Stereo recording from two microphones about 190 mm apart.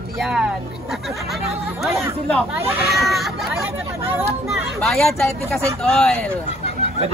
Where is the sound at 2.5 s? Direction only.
10° right (ahead or behind).